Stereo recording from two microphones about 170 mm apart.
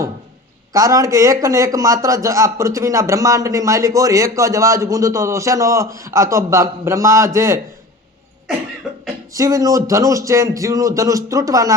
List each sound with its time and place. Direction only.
0.7 s speech: 20° right (ahead or behind)
9.3 s speech: 20° right (ahead or behind)